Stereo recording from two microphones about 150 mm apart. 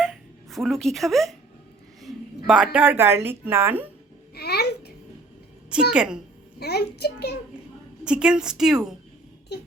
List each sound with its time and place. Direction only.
0.0 s a sound: centre (ahead or behind)
2.5 s speech: 10° right (ahead or behind)
4.4 s babbling: 90° left
5.7 s speech: 5° right (ahead or behind)
6.6 s a child's voice: 90° left
8.0 s a woman's voice: 5° right (ahead or behind)
9.5 s a child's voice: 90° left